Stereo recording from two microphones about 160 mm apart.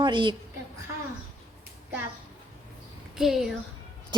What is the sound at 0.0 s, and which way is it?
Speech, 30° right (ahead or behind).